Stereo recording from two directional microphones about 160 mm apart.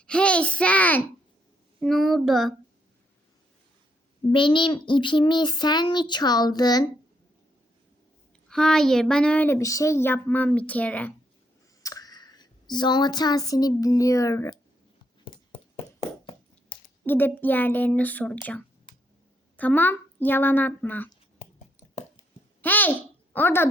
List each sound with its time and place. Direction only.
0.0 s a sound: 5° left (ahead or behind)
1.8 s child singing: centre (ahead or behind)
4.3 s child singing: 30° left (ahead or behind)
8.4 s speech: 5° left (ahead or behind)
11.8 s speech: 20° left (ahead or behind)
15.2 s a sound: 35° left (ahead or behind)
16.6 s speech: 10° left (ahead or behind)
19.5 s speech: 10° left (ahead or behind)
22.6 s a sound: 10° left (ahead or behind)